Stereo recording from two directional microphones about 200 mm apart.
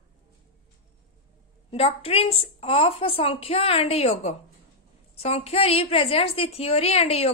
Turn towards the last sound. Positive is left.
turn(degrees=30)  # may be behind; listen again after turning